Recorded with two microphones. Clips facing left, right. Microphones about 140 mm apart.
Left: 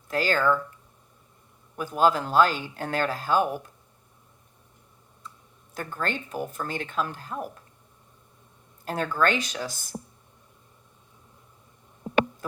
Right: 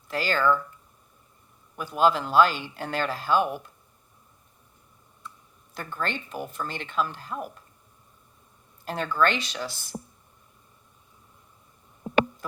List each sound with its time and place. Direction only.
0.1 s speech: 45° left (ahead or behind)
1.8 s speech: 45° left (ahead or behind)
5.7 s speech: 45° left (ahead or behind)
8.8 s speech: 45° left (ahead or behind)